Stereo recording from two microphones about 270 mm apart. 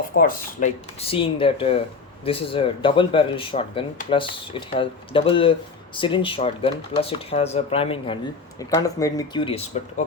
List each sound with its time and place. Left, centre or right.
0.2 s speech: left